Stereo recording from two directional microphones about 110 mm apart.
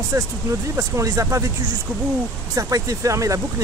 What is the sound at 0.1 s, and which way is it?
Speech, 25° right (ahead or behind).